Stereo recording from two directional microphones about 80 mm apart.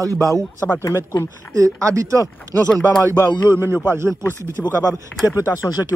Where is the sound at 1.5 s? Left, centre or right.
Right.